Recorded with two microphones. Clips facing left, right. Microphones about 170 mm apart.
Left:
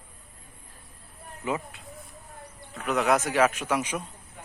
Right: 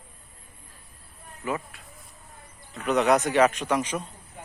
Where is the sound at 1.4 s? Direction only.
20° left (ahead or behind).